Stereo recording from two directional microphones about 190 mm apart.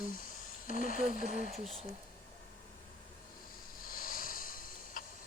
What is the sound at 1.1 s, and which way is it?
Speech, 40° right (ahead or behind).